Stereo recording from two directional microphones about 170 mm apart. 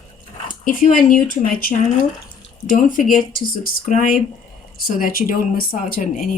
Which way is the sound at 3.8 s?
55° left (ahead or behind).